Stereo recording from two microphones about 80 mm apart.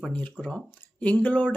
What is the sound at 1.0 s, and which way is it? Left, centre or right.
Speech, centre.